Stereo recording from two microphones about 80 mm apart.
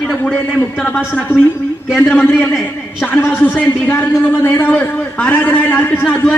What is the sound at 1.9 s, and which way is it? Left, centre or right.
Speech, centre.